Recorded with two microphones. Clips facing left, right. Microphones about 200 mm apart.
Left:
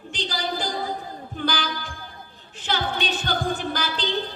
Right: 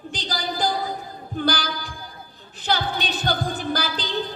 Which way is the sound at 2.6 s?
35° right (ahead or behind).